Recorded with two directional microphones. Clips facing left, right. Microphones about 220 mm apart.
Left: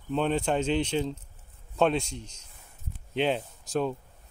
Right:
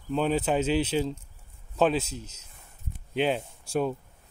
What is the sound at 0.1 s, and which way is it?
Speech, 5° right (ahead or behind).